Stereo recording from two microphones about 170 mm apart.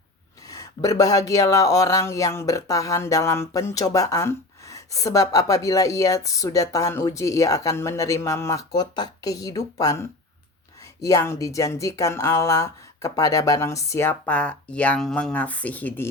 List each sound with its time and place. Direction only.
0.4 s speech: 20° left (ahead or behind)